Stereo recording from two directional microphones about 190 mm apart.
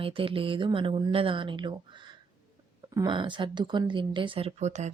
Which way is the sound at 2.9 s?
20° right (ahead or behind).